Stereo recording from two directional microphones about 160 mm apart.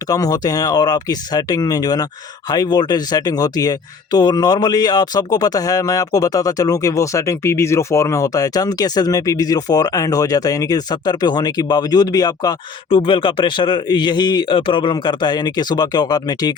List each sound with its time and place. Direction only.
0.1 s speech: 25° left (ahead or behind)